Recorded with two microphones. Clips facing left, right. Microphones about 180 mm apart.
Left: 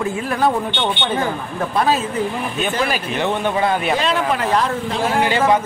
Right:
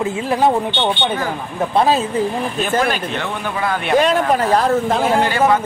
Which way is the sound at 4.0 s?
45° right (ahead or behind).